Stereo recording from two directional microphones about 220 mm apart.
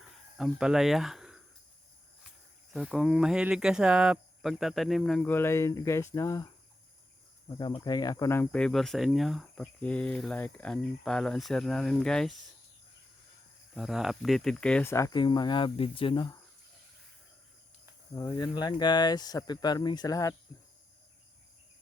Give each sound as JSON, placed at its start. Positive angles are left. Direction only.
{"t": 0.3, "sound": "speech", "side_deg": 0}
{"t": 2.7, "sound": "speech", "side_deg": 0}
{"t": 13.7, "sound": "speech", "side_deg": 0}
{"t": 18.2, "sound": "speech", "side_deg": 15}